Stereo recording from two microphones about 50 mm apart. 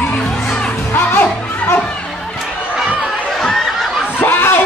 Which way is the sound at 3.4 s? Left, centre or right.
Centre.